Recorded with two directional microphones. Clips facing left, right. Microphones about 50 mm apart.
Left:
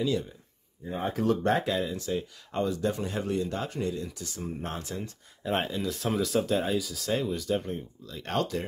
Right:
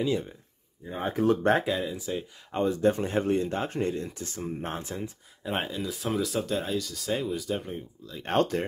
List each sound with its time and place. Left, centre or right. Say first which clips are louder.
0.0 s speech: right 1 dB; right
0.8 s speech: right 2 dB; centre
1.6 s speech: even; centre
2.6 s speech: right 4 dB; right
5.4 s speech: left 2 dB; centre
8.4 s speech: right 4 dB; right